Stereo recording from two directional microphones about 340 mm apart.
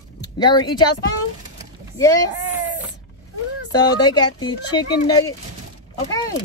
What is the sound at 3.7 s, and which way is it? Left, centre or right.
Speech, centre.